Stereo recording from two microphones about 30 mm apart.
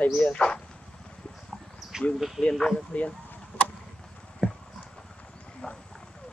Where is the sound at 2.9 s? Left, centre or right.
Left.